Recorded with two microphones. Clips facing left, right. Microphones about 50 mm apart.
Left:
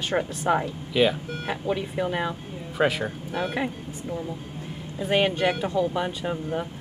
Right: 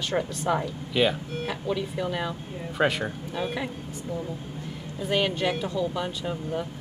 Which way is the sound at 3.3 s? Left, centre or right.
Left.